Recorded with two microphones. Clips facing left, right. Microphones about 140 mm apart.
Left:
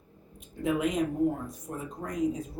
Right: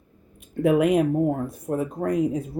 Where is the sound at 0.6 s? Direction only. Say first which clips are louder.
Right 9 dB; 65° right (ahead or behind).